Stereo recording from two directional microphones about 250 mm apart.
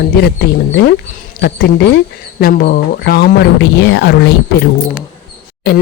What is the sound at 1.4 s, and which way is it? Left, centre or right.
Speech, left.